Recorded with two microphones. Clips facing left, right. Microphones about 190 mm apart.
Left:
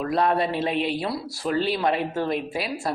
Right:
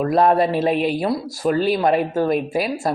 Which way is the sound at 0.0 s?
50° right (ahead or behind).